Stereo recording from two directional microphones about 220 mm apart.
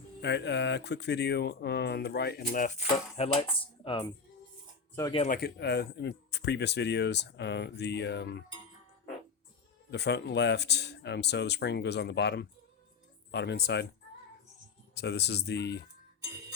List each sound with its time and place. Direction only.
0.2 s speech: 50° left (ahead or behind)
2.9 s speech: 25° left (ahead or behind)
5.2 s speech: 40° left (ahead or behind)
9.9 s speech: 50° left (ahead or behind)
14.9 s speech: 50° left (ahead or behind)